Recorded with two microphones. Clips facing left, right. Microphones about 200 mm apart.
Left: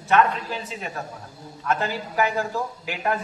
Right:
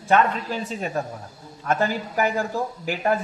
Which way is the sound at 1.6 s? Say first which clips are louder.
Right 3 dB; 45° right (ahead or behind).